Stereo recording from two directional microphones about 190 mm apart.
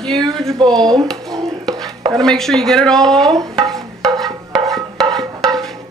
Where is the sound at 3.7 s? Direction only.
Centre (ahead or behind).